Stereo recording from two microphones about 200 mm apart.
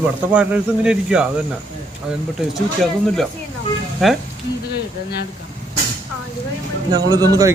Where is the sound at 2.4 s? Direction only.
Centre (ahead or behind).